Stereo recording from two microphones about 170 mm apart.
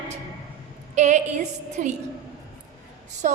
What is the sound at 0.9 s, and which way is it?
A woman's voice, 45° right (ahead or behind).